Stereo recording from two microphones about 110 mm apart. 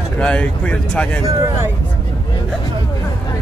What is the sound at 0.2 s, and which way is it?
Speech, 10° left (ahead or behind).